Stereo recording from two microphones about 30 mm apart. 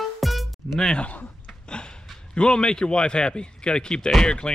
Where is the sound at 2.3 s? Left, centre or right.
Left.